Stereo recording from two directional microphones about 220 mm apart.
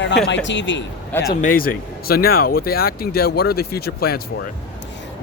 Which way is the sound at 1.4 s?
40° left (ahead or behind).